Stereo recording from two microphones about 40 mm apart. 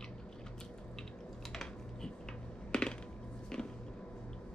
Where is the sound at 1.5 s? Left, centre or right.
Centre.